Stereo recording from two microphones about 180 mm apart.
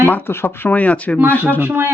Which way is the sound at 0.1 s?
10° left (ahead or behind).